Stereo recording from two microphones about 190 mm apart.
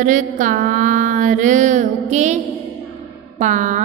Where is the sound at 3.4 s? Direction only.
40° right (ahead or behind).